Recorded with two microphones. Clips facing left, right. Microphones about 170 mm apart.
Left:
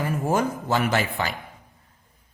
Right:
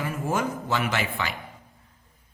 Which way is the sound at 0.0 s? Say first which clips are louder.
Left 4 dB; 40° left (ahead or behind).